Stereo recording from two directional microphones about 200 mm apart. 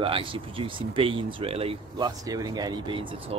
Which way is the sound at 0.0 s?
25° right (ahead or behind).